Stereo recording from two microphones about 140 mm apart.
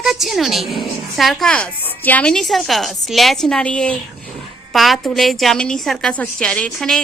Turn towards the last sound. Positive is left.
turn(degrees=5)  # may be behind; listen again after turning